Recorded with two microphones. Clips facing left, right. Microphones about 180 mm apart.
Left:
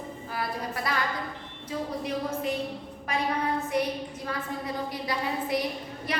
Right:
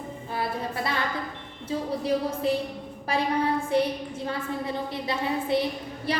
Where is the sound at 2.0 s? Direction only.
35° right (ahead or behind).